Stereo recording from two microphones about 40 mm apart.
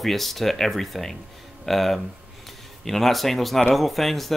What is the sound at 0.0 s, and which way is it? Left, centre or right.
Speech, centre.